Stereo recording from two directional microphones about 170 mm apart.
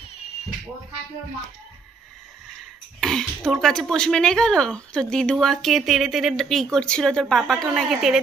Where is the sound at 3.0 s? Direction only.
Centre (ahead or behind).